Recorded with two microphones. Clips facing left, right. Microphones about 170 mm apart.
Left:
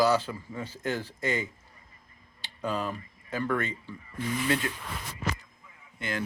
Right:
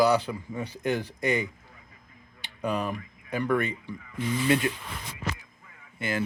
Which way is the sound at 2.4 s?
15° right (ahead or behind).